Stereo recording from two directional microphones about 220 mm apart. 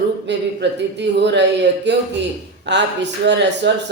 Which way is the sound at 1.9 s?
50° right (ahead or behind).